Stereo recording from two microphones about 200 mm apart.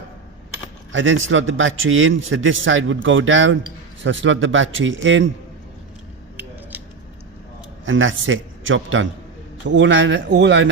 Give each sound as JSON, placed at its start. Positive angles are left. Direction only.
{"t": 0.9, "sound": "a man's voice", "side_deg": -75}
{"t": 6.3, "sound": "scissors", "side_deg": -10}
{"t": 7.9, "sound": "a man's voice", "side_deg": -75}